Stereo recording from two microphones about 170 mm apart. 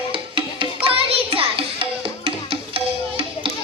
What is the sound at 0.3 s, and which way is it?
Music, 30° right (ahead or behind).